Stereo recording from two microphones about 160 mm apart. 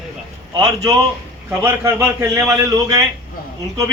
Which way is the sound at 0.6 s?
25° right (ahead or behind).